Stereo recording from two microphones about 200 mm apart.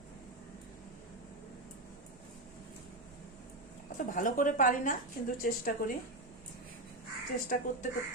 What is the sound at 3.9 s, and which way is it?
A woman's voice, 40° left (ahead or behind).